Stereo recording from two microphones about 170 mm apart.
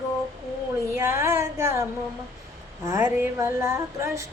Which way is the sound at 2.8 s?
15° right (ahead or behind).